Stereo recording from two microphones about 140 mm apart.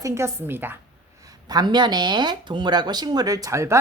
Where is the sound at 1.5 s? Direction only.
30° right (ahead or behind).